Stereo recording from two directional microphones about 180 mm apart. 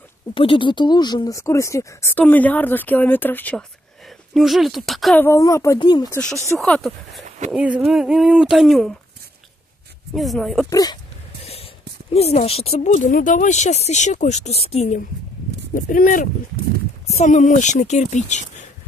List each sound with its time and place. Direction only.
0.3 s speech: 30° left (ahead or behind); by 3.6 s 10° left (ahead or behind)
4.3 s speech: centre (ahead or behind)
5.2 s speech: 15° left (ahead or behind)
6.6 s speech: 5° left (ahead or behind)
7.2 s a sound: 40° right (ahead or behind)
7.5 s speech: 5° right (ahead or behind)
10.1 s speech: centre (ahead or behind)
10.7 s speech: 20° left (ahead or behind)
11.4 s speech: 35° left (ahead or behind)